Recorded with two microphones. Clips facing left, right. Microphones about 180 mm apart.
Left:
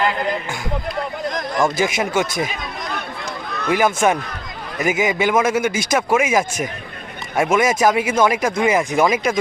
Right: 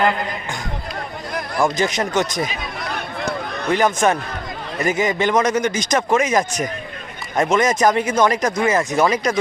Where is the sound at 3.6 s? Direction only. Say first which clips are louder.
Even; 10° left (ahead or behind).